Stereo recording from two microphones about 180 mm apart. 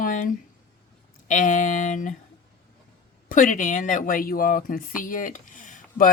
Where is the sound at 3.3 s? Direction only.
45° left (ahead or behind).